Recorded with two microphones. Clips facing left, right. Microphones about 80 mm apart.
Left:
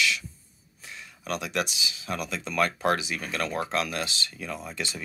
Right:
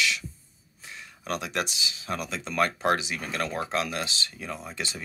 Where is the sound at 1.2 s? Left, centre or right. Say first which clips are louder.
Left 1 dB; right.